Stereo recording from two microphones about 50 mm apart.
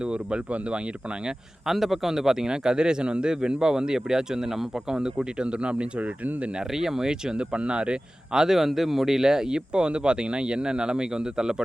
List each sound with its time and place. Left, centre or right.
0.0 s speech: centre
1.6 s speech: centre; by 6.1 s right
6.7 s speech: centre